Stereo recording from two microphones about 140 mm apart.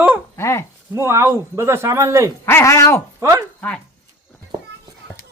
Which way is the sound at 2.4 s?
20° left (ahead or behind).